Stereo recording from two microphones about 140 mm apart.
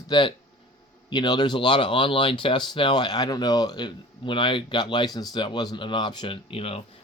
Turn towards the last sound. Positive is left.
turn(degrees=45)  # may be behind; listen again after turning